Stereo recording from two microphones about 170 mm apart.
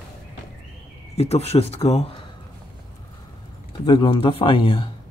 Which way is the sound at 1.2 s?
40° left (ahead or behind).